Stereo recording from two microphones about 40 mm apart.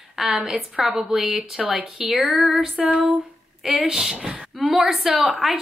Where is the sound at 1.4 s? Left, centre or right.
Right.